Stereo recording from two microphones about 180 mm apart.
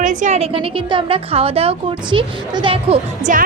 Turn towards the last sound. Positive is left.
turn(degrees=-45)  # may be behind; listen again after turning